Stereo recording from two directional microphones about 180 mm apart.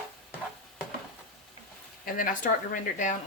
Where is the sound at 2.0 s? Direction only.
50° left (ahead or behind).